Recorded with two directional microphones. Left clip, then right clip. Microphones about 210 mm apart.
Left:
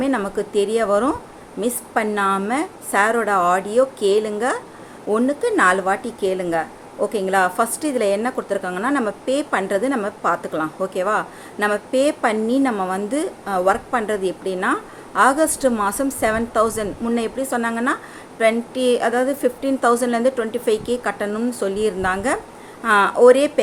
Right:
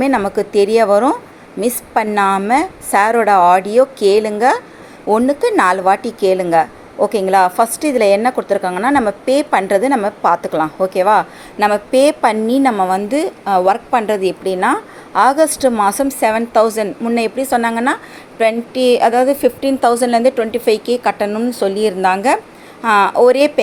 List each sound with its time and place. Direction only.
0.0 s speech: 20° right (ahead or behind)